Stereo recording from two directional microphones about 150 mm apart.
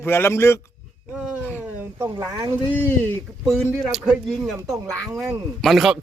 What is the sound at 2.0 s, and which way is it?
Speech, 15° right (ahead or behind).